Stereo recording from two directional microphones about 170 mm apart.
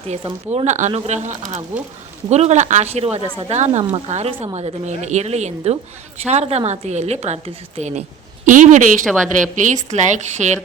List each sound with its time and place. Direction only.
0.1 s a woman's voice: 35° right (ahead or behind)
9.0 s a woman's voice: centre (ahead or behind)
9.9 s speech: 45° right (ahead or behind)